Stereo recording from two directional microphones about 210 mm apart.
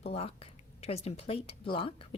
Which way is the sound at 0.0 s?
30° left (ahead or behind).